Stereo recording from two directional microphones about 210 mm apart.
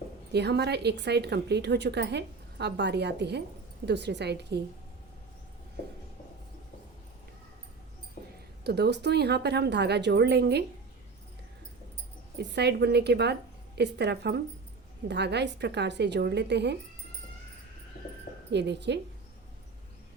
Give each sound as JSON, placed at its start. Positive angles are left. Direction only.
{"t": 0.3, "sound": "a woman's voice", "side_deg": -55}
{"t": 8.6, "sound": "a woman's voice", "side_deg": -50}
{"t": 12.4, "sound": "a woman's voice", "side_deg": -55}
{"t": 18.5, "sound": "a woman's voice", "side_deg": -55}